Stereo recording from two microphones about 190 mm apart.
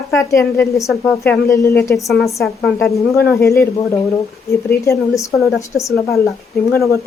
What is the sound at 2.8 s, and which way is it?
Speech, 15° left (ahead or behind).